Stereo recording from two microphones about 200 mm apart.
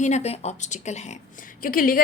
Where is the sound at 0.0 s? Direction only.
35° left (ahead or behind).